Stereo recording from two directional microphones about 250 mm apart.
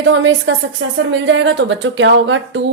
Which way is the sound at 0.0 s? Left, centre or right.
Right.